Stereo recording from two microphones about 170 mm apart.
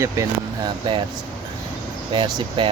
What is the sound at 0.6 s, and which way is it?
Speech, 30° right (ahead or behind).